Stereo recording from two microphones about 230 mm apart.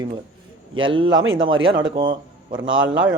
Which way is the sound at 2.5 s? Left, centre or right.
Right.